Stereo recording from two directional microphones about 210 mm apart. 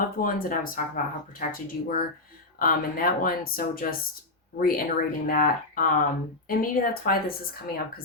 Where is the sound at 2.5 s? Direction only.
40° left (ahead or behind).